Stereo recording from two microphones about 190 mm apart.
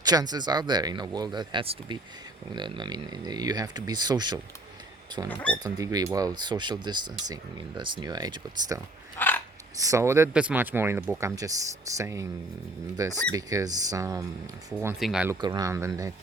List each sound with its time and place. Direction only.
0.0 s speech: 20° right (ahead or behind)
5.3 s speech: 5° left (ahead or behind)
5.5 s speech: 20° right (ahead or behind)
9.1 s a sound: 10° left (ahead or behind)
9.7 s speech: 15° right (ahead or behind)
14.9 s speech: centre (ahead or behind)
15.3 s speech: 20° right (ahead or behind)